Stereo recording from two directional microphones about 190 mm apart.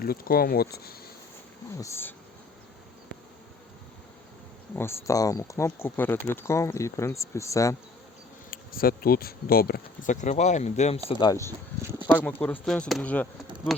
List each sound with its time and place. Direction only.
0.0 s speech: 50° left (ahead or behind)
1.8 s speech: 15° left (ahead or behind)
4.7 s speech: 15° left (ahead or behind)
8.4 s speech: 50° left (ahead or behind)
11.1 s speech: 20° left (ahead or behind); by 13.8 s centre (ahead or behind)